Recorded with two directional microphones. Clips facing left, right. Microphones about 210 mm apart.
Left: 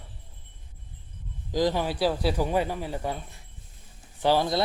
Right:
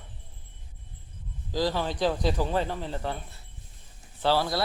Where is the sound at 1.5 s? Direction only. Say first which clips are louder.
Left 3 dB; 15° left (ahead or behind).